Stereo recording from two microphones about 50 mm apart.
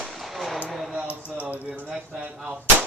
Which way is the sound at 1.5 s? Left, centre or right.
Right.